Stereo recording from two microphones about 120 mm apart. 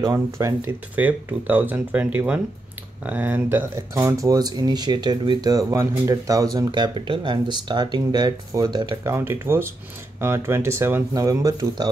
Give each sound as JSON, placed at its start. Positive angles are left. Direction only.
{"t": 0.0, "sound": "speech", "side_deg": -25}
{"t": 0.9, "sound": "speech", "side_deg": -15}
{"t": 6.7, "sound": "speech", "side_deg": -40}
{"t": 9.0, "sound": "speech", "side_deg": -20}
{"t": 11.1, "sound": "speech", "side_deg": -30}